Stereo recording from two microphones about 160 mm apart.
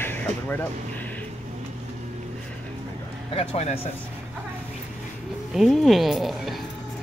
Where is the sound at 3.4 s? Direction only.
40° left (ahead or behind).